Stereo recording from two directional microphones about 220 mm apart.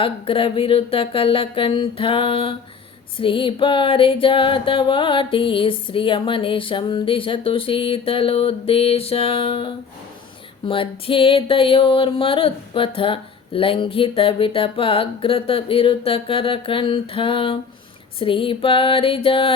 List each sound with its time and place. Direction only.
0.0 s music: 25° left (ahead or behind)